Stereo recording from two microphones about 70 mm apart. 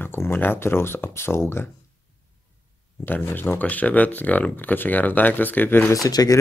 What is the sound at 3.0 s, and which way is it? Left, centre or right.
Speech, left.